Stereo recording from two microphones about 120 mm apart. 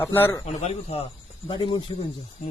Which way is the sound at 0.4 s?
65° left (ahead or behind).